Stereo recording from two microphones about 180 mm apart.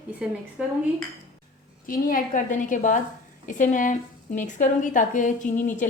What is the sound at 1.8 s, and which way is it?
Speech, 50° left (ahead or behind).